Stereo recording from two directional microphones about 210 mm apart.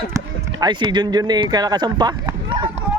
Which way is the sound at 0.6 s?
20° right (ahead or behind).